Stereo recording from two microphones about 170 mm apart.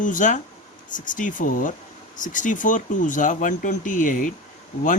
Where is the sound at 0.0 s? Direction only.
50° left (ahead or behind).